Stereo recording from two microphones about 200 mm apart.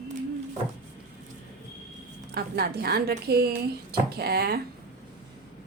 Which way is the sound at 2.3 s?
50° right (ahead or behind).